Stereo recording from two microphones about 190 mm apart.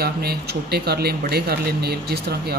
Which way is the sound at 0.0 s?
55° right (ahead or behind).